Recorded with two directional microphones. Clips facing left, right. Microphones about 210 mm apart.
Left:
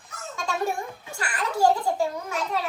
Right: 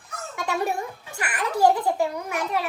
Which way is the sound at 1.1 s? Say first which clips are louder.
Right 1 dB; 20° right (ahead or behind).